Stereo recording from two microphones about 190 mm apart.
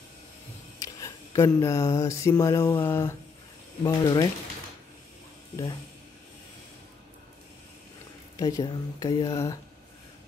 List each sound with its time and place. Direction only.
0.7 s a sound: 15° left (ahead or behind)
2.9 s speech: 10° left (ahead or behind)
8.4 s speech: 20° left (ahead or behind)